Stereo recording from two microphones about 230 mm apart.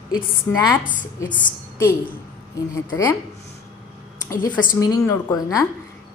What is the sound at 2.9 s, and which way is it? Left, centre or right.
Speech, centre.